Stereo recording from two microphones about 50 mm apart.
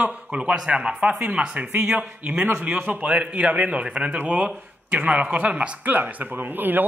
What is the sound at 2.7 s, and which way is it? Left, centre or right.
A man's voice, right.